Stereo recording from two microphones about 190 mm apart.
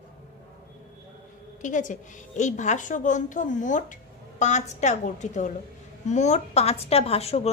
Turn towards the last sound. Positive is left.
turn(degrees=30)  # may be behind; listen again after turning